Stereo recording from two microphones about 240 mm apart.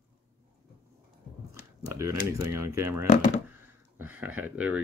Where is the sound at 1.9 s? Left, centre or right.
Centre.